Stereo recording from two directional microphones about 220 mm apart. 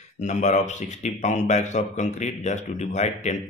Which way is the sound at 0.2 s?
30° left (ahead or behind).